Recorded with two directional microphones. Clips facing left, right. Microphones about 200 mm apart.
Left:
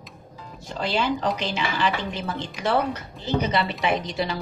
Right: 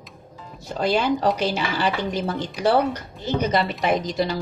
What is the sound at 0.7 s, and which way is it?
Speech, 45° right (ahead or behind).